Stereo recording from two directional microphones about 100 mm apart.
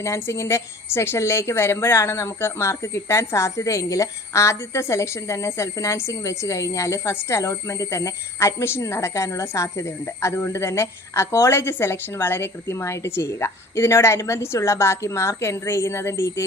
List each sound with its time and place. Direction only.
0.0 s a woman's voice: 25° left (ahead or behind)